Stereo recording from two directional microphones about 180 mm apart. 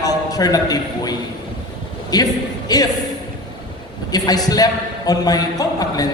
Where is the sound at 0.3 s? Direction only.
20° left (ahead or behind).